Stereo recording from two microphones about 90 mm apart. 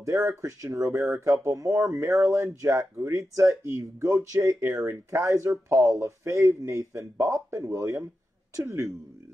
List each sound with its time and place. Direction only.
0.0 s speech: 35° right (ahead or behind)